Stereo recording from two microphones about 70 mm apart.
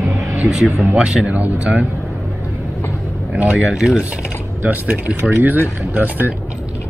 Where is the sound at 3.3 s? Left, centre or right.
Centre.